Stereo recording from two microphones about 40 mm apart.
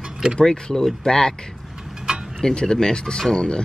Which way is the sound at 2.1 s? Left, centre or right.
Centre.